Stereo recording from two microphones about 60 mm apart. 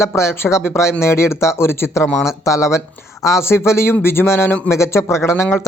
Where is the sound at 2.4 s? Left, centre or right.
Left.